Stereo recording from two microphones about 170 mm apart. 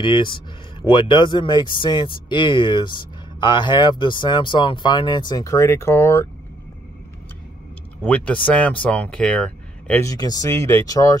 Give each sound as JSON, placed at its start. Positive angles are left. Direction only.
{"t": 0.0, "sound": "speech", "side_deg": 30}
{"t": 8.0, "sound": "speech", "side_deg": 10}
{"t": 10.0, "sound": "speech", "side_deg": 25}